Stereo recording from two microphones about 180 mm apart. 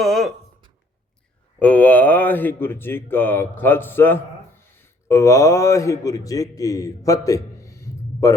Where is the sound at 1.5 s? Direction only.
10° left (ahead or behind).